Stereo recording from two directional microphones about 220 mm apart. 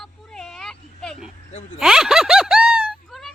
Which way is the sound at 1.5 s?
30° left (ahead or behind).